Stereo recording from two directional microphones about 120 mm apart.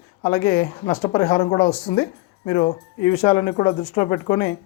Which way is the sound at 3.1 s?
40° left (ahead or behind).